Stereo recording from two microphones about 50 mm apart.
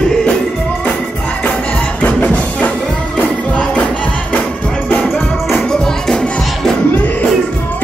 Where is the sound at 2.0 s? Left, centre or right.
Left.